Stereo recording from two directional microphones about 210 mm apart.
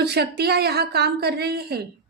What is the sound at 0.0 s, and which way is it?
A woman's voice, 50° right (ahead or behind).